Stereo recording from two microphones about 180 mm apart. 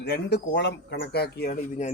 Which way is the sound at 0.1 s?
70° left (ahead or behind).